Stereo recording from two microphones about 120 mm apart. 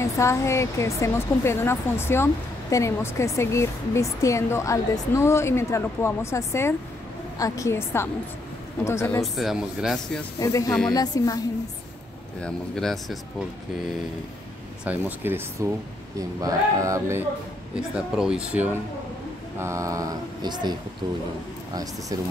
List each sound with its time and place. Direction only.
0.0 s speech: 25° left (ahead or behind)
9.2 s a man's voice: centre (ahead or behind)
10.4 s a woman's voice: 30° left (ahead or behind)
12.4 s a man's voice: 5° left (ahead or behind)
14.9 s speech: 15° right (ahead or behind)
16.2 s mantra: 30° right (ahead or behind)
17.7 s speech: 5° right (ahead or behind)
19.6 s mantra: 25° right (ahead or behind)